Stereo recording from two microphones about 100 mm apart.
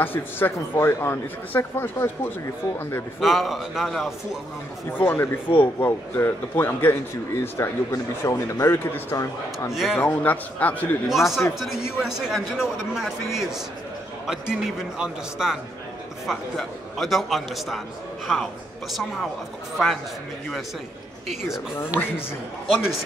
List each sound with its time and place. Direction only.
0.0 s speech: 20° left (ahead or behind)
3.2 s a man's voice: centre (ahead or behind)
4.9 s speech: 25° left (ahead or behind)
9.1 s speech: 35° left (ahead or behind)
9.7 s a man's voice: 5° right (ahead or behind)
9.9 s a man's voice: 20° left (ahead or behind)
11.1 s a man's voice: 5° right (ahead or behind)
21.3 s a man's voice: 5° right (ahead or behind)